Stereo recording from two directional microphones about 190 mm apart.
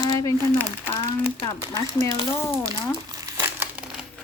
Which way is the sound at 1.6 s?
20° right (ahead or behind).